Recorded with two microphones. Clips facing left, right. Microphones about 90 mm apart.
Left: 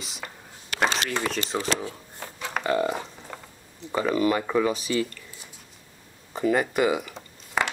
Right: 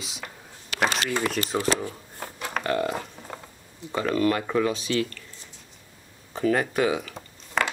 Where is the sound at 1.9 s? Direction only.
15° right (ahead or behind).